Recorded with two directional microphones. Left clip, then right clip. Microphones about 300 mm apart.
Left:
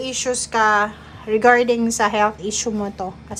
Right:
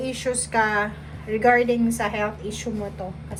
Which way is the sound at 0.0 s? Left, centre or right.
Centre.